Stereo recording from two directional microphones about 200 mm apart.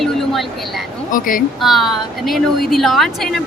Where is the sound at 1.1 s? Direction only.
45° left (ahead or behind).